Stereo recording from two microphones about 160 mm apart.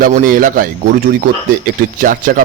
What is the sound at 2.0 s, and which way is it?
Speech, 60° right (ahead or behind).